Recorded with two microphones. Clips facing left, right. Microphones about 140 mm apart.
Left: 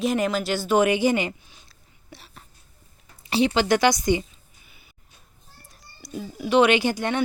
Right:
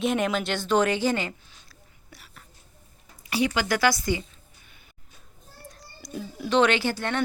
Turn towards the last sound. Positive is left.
turn(degrees=15)  # may be behind; listen again after turning